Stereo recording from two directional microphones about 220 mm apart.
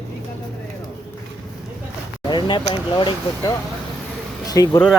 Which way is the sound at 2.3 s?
20° left (ahead or behind).